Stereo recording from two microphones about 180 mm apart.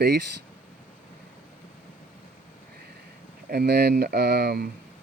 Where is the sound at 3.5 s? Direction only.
65° right (ahead or behind).